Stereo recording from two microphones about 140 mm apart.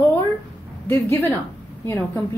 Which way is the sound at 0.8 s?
15° left (ahead or behind).